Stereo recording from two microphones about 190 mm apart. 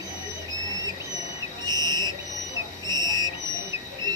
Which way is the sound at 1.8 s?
20° right (ahead or behind).